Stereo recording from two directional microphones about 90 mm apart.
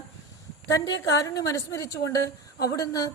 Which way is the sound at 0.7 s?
40° left (ahead or behind).